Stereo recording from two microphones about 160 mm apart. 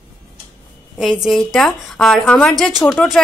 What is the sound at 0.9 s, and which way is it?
A woman's voice, centre (ahead or behind).